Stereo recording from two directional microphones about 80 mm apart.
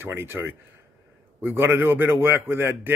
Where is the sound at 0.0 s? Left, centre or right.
Right.